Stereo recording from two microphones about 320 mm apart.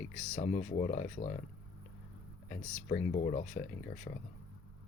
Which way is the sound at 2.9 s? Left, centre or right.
Left.